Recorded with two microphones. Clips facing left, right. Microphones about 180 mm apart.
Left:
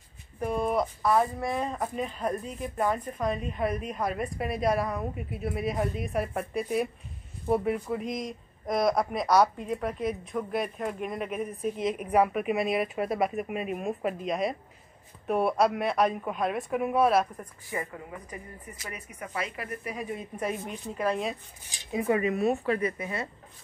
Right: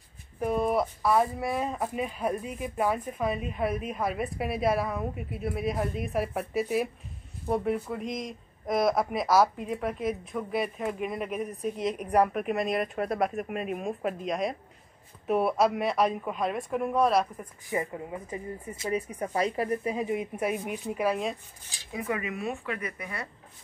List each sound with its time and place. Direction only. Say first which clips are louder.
0.4 s speech: right 1 dB; centre (ahead or behind)
17.6 s speech: right 4 dB; 25° right (ahead or behind); by 21.4 s 5° right (ahead or behind)
21.6 s speech: left 5 dB; 20° left (ahead or behind)